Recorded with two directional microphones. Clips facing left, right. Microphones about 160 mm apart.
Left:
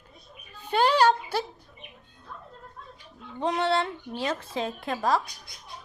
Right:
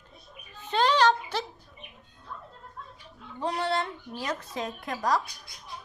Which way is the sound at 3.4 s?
25° left (ahead or behind).